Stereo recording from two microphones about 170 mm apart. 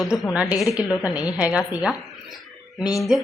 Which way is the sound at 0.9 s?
20° left (ahead or behind).